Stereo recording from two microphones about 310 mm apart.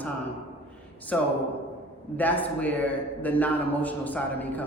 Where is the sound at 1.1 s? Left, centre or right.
Centre.